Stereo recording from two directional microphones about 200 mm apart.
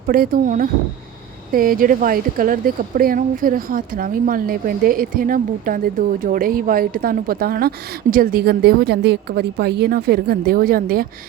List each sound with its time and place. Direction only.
0.1 s speech: 45° right (ahead or behind)